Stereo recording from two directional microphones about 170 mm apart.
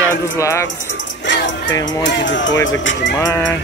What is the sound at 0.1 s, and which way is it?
Speech, 15° left (ahead or behind).